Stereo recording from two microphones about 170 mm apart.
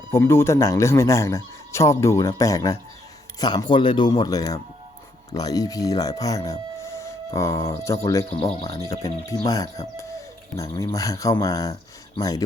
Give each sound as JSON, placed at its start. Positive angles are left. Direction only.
{"t": 0.1, "sound": "speech", "side_deg": 15}